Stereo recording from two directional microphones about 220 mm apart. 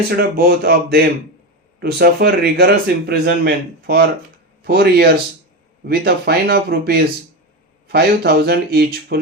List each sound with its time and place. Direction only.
0.2 s speech: 45° right (ahead or behind)